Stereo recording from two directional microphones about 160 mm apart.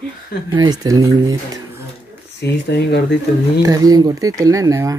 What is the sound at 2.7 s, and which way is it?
Speech, 90° left.